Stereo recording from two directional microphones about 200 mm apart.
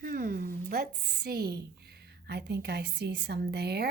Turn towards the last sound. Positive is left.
turn(degrees=-55)  # may be behind; listen again after turning